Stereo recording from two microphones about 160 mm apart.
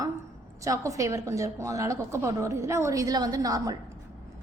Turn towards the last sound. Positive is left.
turn(degrees=-20)  # may be behind; listen again after turning